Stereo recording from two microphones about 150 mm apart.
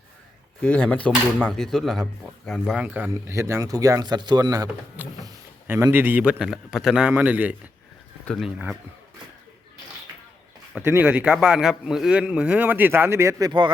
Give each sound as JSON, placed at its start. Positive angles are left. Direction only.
{"t": 0.6, "sound": "speech", "side_deg": 10}
{"t": 2.8, "sound": "speech", "side_deg": -10}
{"t": 5.0, "sound": "a man's voice", "side_deg": -10}
{"t": 8.2, "sound": "speech", "side_deg": 5}
{"t": 8.4, "sound": "speech", "side_deg": -5}
{"t": 10.8, "sound": "a man's voice", "side_deg": -10}